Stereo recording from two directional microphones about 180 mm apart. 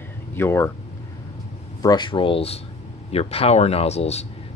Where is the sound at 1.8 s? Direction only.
25° left (ahead or behind).